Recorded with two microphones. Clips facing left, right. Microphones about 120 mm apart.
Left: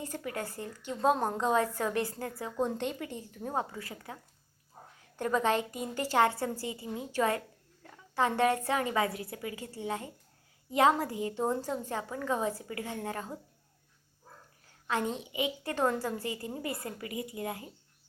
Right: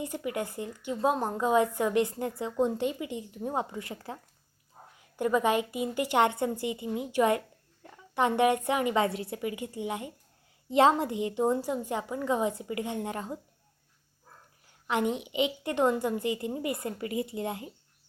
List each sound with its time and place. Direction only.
0.0 s a woman's voice: 15° right (ahead or behind)
0.9 s a woman's voice: 5° right (ahead or behind); by 2.6 s 20° right (ahead or behind)
2.6 s a woman's voice: 10° right (ahead or behind); by 4.2 s 30° right (ahead or behind)
5.1 s a woman's voice: 10° right (ahead or behind)
10.7 s a woman's voice: 25° right (ahead or behind)
11.3 s a woman's voice: 15° right (ahead or behind)
14.8 s a woman's voice: 15° right (ahead or behind)